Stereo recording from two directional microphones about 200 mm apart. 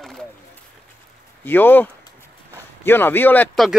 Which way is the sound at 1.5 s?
10° left (ahead or behind).